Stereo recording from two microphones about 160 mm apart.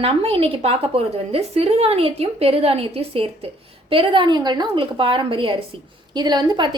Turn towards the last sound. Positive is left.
turn(degrees=-30)  # may be behind; listen again after turning